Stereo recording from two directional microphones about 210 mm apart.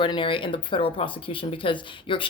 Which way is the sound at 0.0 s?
25° left (ahead or behind).